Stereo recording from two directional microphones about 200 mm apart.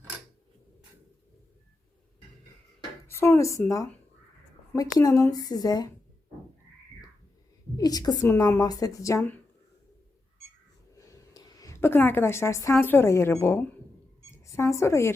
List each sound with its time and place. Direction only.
3.1 s a woman's voice: 15° left (ahead or behind)
7.8 s a woman's voice: 20° left (ahead or behind)
10.9 s speech: 15° left (ahead or behind)